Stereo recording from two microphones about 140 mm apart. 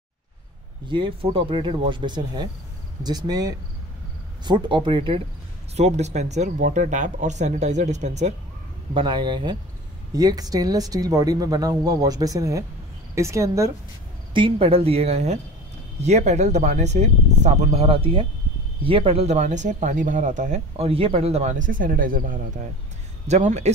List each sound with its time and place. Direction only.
0.8 s speech: 35° right (ahead or behind)
5.8 s speech: 50° right (ahead or behind)
8.9 s speech: 35° right (ahead or behind)
14.3 s speech: 40° right (ahead or behind); by 22.4 s 75° right (ahead or behind)
23.2 s speech: 55° right (ahead or behind)